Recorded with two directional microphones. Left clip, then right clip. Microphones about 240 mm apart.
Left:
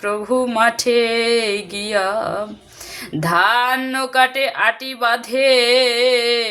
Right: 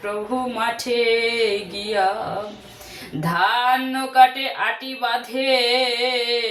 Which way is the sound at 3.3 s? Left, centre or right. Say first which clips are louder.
Left 3 dB; left.